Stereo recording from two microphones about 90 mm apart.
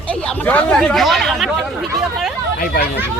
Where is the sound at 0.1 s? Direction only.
15° left (ahead or behind).